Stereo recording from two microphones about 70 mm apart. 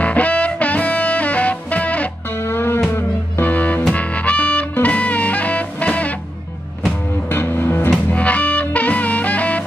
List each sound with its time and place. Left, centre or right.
0.0 s music: centre
2.5 s music: left
3.4 s music: left
7.2 s music: left
8.1 s music: centre